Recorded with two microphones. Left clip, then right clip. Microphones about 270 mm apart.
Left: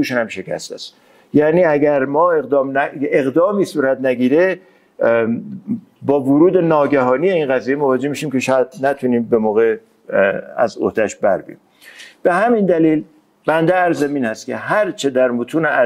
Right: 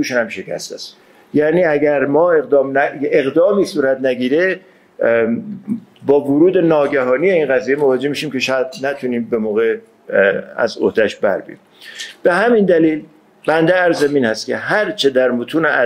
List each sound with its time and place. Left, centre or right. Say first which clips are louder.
0.0 s speech: right 1 dB; left
6.0 s speech: right 1 dB; centre; by 9.8 s left
10.0 s speech: right 2 dB; centre